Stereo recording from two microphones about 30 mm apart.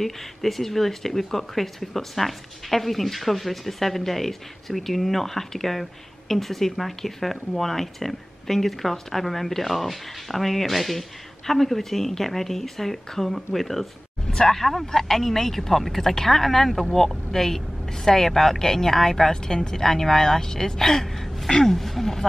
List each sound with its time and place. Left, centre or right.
0.0 s speech: centre
21.1 s a sound: centre
21.5 s speech: centre